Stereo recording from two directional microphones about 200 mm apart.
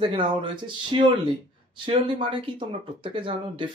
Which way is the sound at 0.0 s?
25° right (ahead or behind).